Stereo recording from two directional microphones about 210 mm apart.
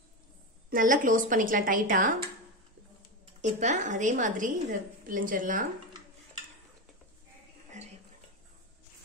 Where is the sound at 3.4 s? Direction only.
35° right (ahead or behind).